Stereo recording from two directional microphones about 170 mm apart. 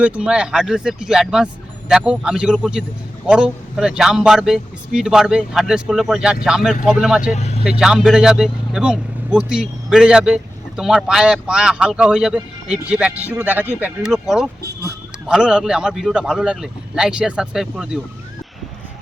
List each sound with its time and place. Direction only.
0.0 s speech: 5° right (ahead or behind)
7.3 s vehicle: 40° left (ahead or behind)
7.8 s speech: 5° right (ahead or behind)